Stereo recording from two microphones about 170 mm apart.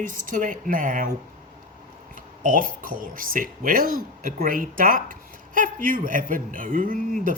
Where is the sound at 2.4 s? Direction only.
50° right (ahead or behind).